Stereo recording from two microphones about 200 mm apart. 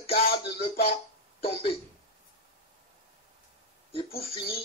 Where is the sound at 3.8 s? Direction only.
30° left (ahead or behind).